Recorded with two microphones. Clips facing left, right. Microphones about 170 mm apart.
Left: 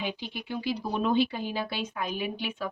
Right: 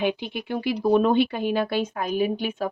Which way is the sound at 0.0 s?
60° right (ahead or behind).